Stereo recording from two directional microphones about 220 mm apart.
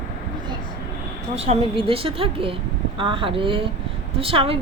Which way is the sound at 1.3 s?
25° right (ahead or behind).